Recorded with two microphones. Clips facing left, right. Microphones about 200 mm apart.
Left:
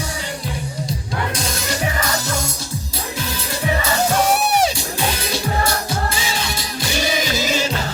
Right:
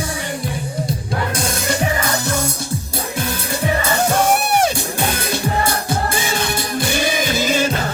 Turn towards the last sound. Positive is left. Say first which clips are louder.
# right 3 dB
turn(degrees=-55)  # may be behind; listen again after turning